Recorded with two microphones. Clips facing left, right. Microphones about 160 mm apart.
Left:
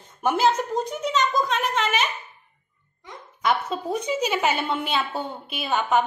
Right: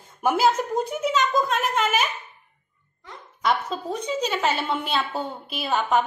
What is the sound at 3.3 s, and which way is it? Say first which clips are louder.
A woman's voice: even; 5° left (ahead or behind).